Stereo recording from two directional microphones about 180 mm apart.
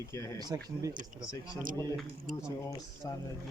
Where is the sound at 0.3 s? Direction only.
20° right (ahead or behind).